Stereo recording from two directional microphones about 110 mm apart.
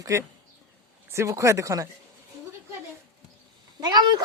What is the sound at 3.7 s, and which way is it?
Cat, 35° right (ahead or behind).